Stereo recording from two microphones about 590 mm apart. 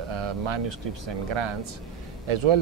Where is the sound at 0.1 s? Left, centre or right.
Right.